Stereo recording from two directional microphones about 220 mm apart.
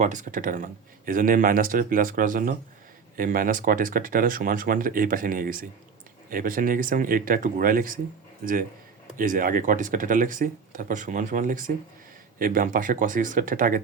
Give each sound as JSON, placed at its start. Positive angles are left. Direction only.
{"t": 0.0, "sound": "speech", "side_deg": -35}
{"t": 9.1, "sound": "speech", "side_deg": -40}